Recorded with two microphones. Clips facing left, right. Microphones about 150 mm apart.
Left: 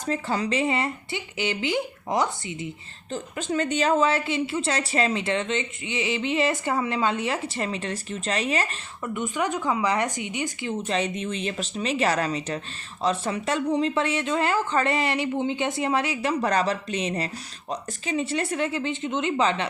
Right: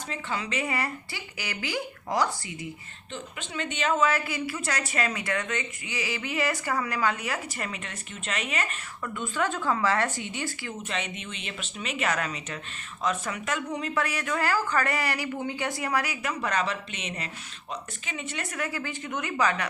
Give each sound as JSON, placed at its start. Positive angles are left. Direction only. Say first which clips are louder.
{"t": 0.0, "sound": "speech", "louder": "left 7 dB", "side_deg": 40}
{"t": 0.6, "sound": "a woman's voice", "louder": "left 5 dB", "side_deg": 25}
{"t": 3.1, "sound": "a woman's voice", "louder": "left 9 dB", "side_deg": 40}
{"t": 9.0, "sound": "a woman's voice", "louder": "left 3 dB", "side_deg": 20}
{"t": 10.8, "sound": "a woman's voice", "louder": "left 8 dB", "side_deg": 35}